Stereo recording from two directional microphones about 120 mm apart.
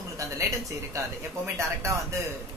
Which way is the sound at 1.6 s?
25° right (ahead or behind).